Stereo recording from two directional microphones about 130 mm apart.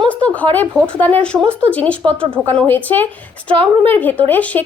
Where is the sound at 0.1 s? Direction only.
10° left (ahead or behind).